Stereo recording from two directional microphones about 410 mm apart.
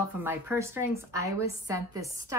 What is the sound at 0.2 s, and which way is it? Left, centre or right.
Speech, centre.